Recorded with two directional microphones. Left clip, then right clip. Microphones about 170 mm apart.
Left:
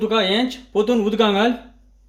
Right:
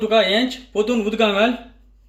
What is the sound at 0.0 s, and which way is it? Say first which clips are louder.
Speech: right 2 dB; 40° left (ahead or behind).